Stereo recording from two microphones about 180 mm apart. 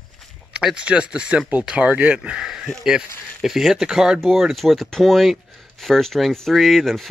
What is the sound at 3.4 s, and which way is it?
Speech, centre (ahead or behind).